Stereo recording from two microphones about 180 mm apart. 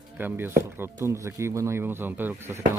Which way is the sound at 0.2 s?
10° right (ahead or behind).